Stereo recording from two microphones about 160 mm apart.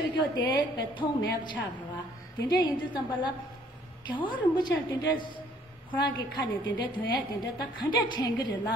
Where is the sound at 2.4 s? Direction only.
30° left (ahead or behind).